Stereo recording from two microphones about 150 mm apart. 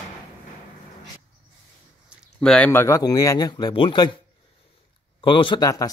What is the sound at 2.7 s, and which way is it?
A man's voice, 15° left (ahead or behind).